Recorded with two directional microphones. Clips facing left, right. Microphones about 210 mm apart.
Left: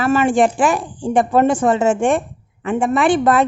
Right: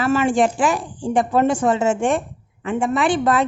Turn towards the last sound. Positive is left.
turn(degrees=55)  # may be behind; listen again after turning